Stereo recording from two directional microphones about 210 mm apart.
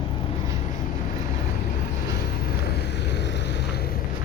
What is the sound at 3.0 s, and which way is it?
Vehicle, 55° left (ahead or behind).